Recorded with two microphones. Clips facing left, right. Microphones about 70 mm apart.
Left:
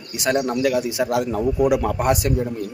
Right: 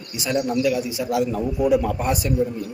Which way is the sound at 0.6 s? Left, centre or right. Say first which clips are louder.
Left 2 dB; left.